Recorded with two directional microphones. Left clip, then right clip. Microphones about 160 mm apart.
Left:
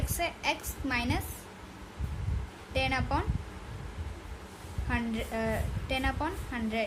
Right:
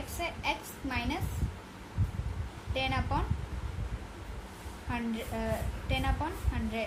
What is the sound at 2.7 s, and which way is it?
Speech, 55° left (ahead or behind).